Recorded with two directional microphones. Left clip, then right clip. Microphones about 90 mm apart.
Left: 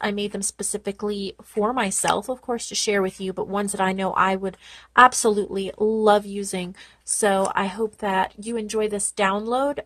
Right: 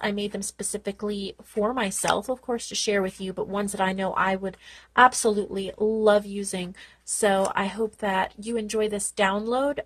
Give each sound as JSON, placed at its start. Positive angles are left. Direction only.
{"t": 0.0, "sound": "a woman's voice", "side_deg": 40}